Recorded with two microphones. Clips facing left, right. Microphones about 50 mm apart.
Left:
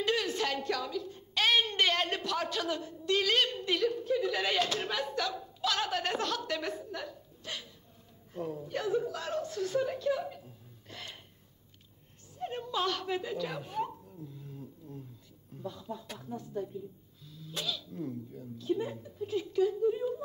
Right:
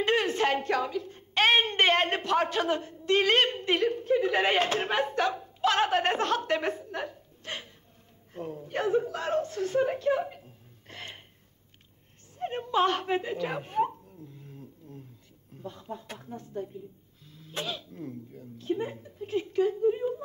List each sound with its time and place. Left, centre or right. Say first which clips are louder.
0.0 s a woman's voice: right 5 dB; right
12.4 s speech: right 7 dB; right
14.2 s a sound: left 2 dB; right
15.5 s speech: right 1 dB; right